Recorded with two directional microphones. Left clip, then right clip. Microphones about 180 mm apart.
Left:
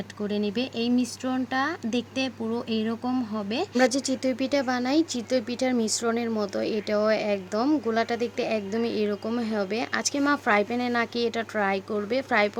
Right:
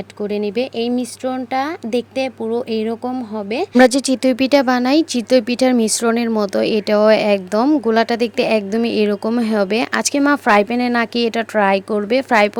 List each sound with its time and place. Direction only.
0.2 s speech: 30° right (ahead or behind)
3.8 s speech: 50° right (ahead or behind)